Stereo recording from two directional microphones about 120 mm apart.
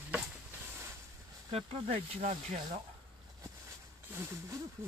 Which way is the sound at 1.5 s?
60° right (ahead or behind).